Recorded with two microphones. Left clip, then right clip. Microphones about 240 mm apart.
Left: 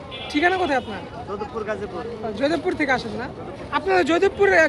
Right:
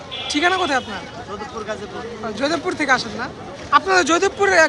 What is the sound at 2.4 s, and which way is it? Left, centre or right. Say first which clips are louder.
Speech: right 1 dB; centre.